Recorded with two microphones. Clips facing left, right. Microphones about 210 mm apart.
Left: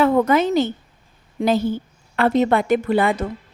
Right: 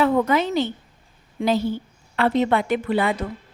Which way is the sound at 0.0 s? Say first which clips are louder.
Left 3 dB; 50° left (ahead or behind).